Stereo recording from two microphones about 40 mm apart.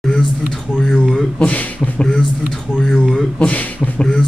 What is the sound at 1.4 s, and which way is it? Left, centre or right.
Speech, left.